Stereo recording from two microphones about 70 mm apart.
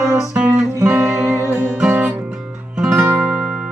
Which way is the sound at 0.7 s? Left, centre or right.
Right.